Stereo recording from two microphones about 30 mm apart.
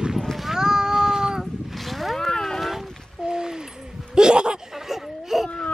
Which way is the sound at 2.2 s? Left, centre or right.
Centre.